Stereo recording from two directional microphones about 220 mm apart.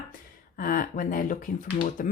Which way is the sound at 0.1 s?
40° left (ahead or behind).